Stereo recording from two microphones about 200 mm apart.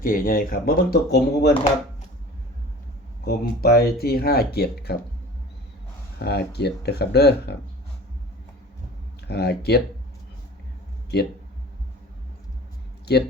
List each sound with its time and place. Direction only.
0.0 s speech: 45° left (ahead or behind)
3.2 s speech: 50° left (ahead or behind)
6.1 s speech: 55° left (ahead or behind)
9.2 s speech: 55° left (ahead or behind)
13.1 s speech: 55° left (ahead or behind)